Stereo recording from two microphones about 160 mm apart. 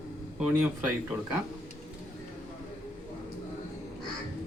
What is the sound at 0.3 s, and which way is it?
Speech, 5° right (ahead or behind).